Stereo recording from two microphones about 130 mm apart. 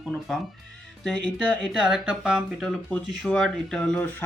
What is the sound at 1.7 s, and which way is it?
Speech, 5° right (ahead or behind).